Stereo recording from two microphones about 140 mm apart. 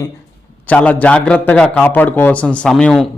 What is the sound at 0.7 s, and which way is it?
A man's voice, 10° left (ahead or behind).